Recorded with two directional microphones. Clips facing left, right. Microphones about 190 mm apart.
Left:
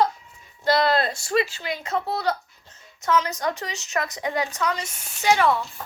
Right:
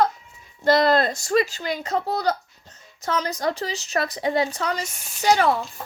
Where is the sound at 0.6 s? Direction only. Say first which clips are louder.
Right 3 dB; 45° right (ahead or behind).